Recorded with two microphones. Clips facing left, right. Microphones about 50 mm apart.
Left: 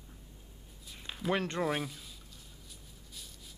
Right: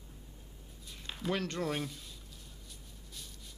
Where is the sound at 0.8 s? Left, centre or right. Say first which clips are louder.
Left 2 dB; centre.